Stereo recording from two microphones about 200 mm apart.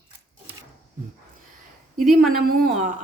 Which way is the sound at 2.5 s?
50° right (ahead or behind).